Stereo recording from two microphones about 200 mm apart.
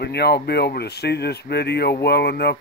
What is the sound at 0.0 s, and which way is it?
Speech, 55° left (ahead or behind).